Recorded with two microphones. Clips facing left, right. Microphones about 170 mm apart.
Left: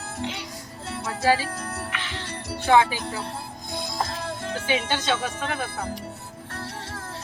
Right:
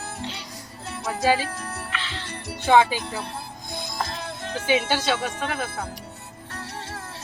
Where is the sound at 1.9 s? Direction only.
15° left (ahead or behind).